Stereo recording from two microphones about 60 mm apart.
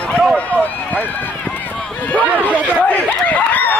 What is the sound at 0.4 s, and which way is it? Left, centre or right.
Run, left.